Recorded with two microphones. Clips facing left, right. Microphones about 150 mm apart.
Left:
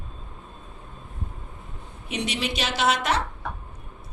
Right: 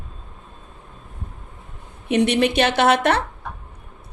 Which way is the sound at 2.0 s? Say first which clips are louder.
Right 11 dB; 55° right (ahead or behind).